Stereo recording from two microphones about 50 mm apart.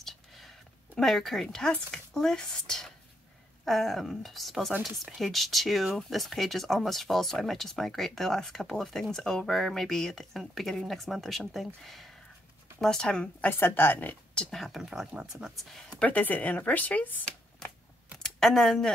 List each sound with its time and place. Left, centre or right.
0.0 s a sound: centre
0.9 s speech: centre
12.8 s speech: centre
13.4 s a woman's voice: left
14.5 s speech: centre
14.8 s speech: centre
15.5 s speech: centre
16.0 s a woman's voice: left
18.2 s speech: centre